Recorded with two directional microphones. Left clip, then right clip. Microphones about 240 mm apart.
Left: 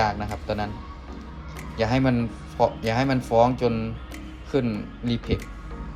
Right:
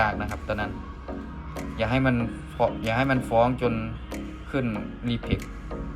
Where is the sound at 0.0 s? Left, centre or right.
Centre.